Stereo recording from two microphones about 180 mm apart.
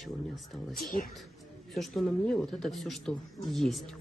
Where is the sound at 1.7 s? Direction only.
Centre (ahead or behind).